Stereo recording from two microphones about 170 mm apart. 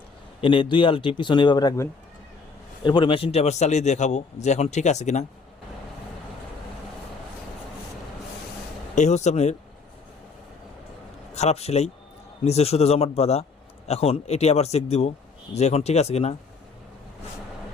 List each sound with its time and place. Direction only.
0.4 s a man's voice: 30° left (ahead or behind)
9.0 s a man's voice: 40° left (ahead or behind)
11.3 s speech: 40° left (ahead or behind)